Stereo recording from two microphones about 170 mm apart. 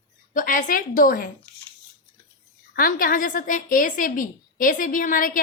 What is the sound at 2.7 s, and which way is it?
A woman's voice, 60° left (ahead or behind).